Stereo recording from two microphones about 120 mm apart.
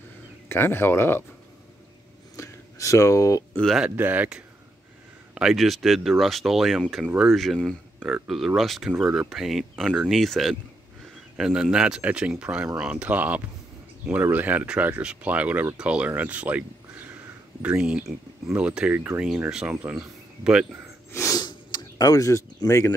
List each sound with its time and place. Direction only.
0.5 s speech: 20° left (ahead or behind)
2.3 s a sound: 25° left (ahead or behind)
3.5 s speech: 5° left (ahead or behind)
3.8 s speech: 15° right (ahead or behind)
21.1 s snort: 25° left (ahead or behind)